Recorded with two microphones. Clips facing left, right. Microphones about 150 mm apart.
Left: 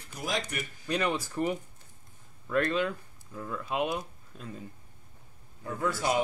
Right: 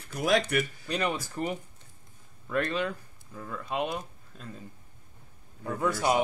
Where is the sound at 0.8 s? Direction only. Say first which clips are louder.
Left 1 dB; centre (ahead or behind).